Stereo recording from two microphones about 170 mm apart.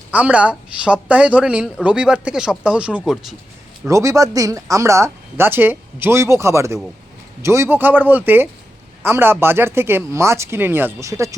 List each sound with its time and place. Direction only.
0.1 s speech: 10° right (ahead or behind)
3.8 s speech: 20° right (ahead or behind)